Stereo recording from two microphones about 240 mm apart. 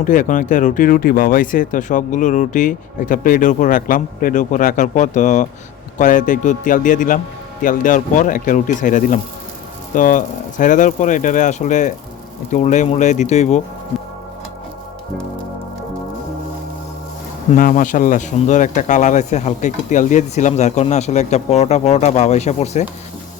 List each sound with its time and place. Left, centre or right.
0.0 s speech: left
17.5 s speech: left